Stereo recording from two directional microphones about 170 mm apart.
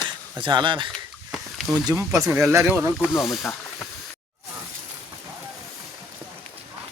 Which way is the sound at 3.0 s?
Centre (ahead or behind).